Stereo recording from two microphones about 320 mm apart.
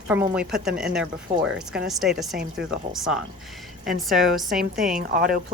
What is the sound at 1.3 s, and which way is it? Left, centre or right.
Speech, right.